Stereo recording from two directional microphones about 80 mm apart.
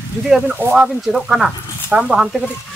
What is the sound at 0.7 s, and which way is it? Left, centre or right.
Speech, centre.